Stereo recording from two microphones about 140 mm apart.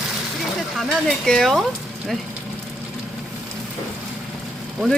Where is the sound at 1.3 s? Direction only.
Centre (ahead or behind).